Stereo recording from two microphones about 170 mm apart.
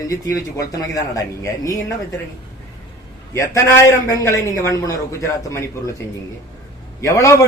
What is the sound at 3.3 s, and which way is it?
Speech, 20° left (ahead or behind).